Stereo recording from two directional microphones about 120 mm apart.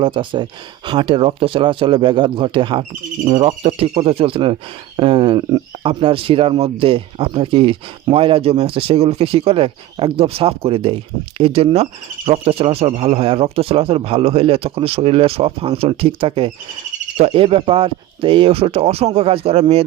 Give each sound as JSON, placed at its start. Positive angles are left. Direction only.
{"t": 0.0, "sound": "speech", "side_deg": -40}